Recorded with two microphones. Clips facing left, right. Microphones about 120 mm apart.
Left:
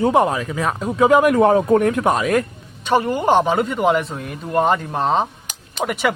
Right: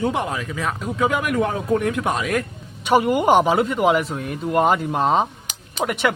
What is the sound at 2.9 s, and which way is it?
Speech, 10° right (ahead or behind).